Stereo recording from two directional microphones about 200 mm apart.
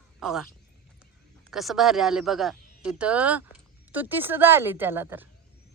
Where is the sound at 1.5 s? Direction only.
Centre (ahead or behind).